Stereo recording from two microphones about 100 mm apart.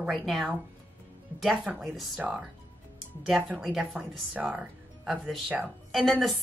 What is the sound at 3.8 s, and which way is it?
A woman's voice, 15° right (ahead or behind).